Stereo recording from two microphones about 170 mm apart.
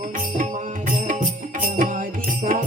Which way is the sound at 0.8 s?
50° right (ahead or behind).